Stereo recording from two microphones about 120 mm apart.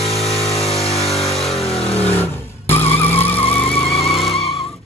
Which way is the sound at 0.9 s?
55° left (ahead or behind).